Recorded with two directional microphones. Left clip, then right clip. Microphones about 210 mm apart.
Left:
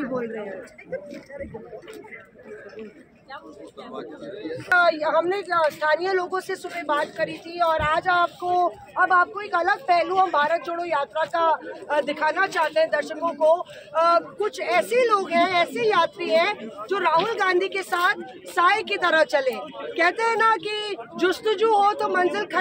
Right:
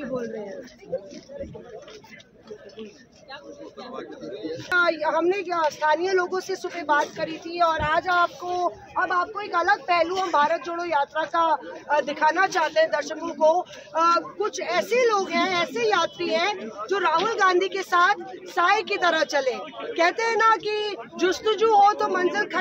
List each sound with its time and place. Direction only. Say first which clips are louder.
4.6 s a woman's voice: left 3 dB; 20° right (ahead or behind); by 22.6 s centre (ahead or behind)